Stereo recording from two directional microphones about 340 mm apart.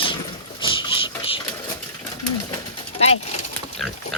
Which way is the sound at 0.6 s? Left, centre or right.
Centre.